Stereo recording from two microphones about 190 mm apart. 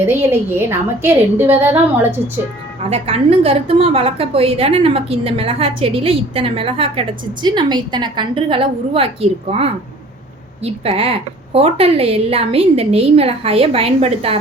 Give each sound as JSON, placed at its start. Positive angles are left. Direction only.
{"t": 0.0, "sound": "a woman's voice", "side_deg": -10}
{"t": 2.9, "sound": "a woman's voice", "side_deg": -30}